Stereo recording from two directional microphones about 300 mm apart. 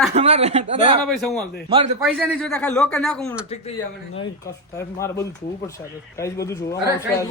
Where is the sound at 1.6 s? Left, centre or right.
Centre.